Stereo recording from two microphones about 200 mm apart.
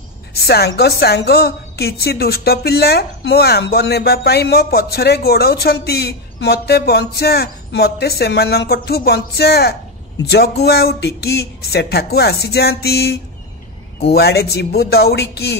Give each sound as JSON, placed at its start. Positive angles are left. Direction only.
{"t": 0.4, "sound": "a woman's voice", "side_deg": 55}